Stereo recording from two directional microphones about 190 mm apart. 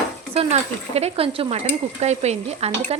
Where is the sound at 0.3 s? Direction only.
35° right (ahead or behind).